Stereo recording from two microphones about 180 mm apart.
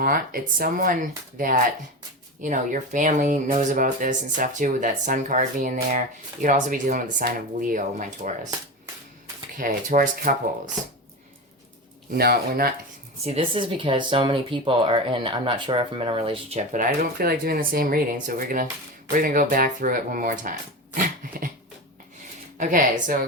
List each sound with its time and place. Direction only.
0.0 s speech: 55° right (ahead or behind)
9.6 s speech: 50° right (ahead or behind)
12.1 s speech: 60° right (ahead or behind)
13.2 s speech: 30° right (ahead or behind); by 20.5 s 50° right (ahead or behind)
20.9 s dog: 50° right (ahead or behind)
22.5 s speech: 45° right (ahead or behind)